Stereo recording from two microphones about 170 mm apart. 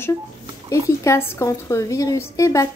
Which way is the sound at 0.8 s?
15° left (ahead or behind).